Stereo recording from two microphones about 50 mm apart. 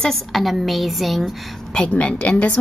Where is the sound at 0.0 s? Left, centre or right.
Centre.